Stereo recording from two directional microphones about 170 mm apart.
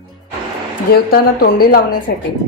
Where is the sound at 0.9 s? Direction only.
65° left (ahead or behind).